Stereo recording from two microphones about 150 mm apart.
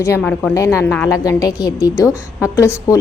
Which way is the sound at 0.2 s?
5° left (ahead or behind).